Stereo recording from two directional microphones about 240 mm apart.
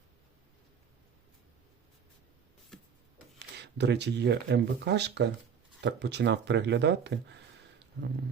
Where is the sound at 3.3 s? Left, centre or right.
Right.